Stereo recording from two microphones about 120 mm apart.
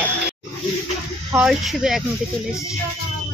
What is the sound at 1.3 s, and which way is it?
Speech, 5° right (ahead or behind).